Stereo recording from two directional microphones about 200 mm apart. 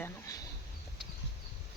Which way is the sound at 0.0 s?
15° left (ahead or behind).